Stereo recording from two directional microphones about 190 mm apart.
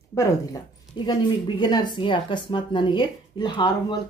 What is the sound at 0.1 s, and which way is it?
Speech, 20° left (ahead or behind).